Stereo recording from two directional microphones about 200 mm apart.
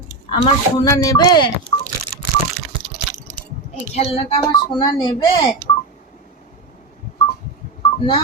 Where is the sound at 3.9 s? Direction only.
30° left (ahead or behind).